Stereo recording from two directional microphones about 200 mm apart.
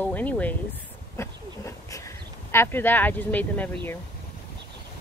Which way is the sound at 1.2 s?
15° left (ahead or behind).